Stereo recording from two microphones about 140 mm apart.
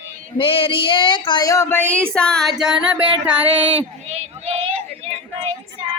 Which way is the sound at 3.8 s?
45° right (ahead or behind).